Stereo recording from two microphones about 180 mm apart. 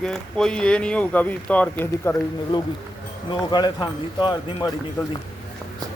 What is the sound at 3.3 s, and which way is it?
Speech, 25° left (ahead or behind).